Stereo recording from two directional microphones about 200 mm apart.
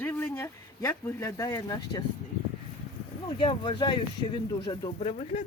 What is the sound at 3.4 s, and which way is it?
Speech, 25° left (ahead or behind).